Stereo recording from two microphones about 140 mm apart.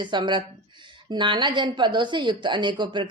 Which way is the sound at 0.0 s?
35° right (ahead or behind).